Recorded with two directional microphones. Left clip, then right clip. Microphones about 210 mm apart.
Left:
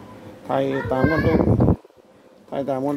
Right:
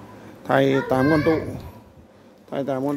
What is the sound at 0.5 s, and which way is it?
Speech, 20° right (ahead or behind).